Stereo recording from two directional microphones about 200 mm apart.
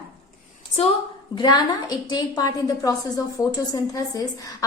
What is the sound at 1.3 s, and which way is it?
A woman's voice, 20° left (ahead or behind).